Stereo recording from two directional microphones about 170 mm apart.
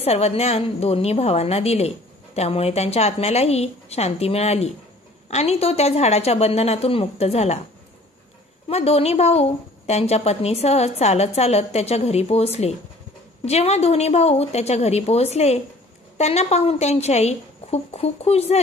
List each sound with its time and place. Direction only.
0.0 s a woman's voice: 35° left (ahead or behind)
8.6 s a woman's voice: 35° left (ahead or behind)